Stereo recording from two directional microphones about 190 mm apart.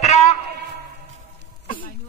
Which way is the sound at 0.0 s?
35° left (ahead or behind).